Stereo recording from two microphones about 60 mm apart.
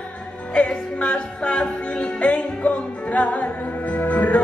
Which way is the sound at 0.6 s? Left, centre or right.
Centre.